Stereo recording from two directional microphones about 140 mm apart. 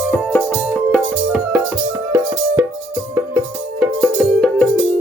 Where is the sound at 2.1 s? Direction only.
20° right (ahead or behind).